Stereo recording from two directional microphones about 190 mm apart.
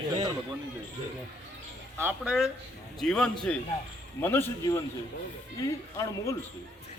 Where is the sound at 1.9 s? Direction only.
5° right (ahead or behind); by 6.4 s 15° left (ahead or behind).